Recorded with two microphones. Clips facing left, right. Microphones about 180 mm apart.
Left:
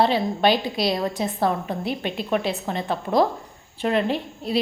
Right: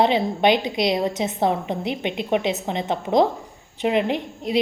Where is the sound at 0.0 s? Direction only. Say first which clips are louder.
Right 1 dB; 20° right (ahead or behind).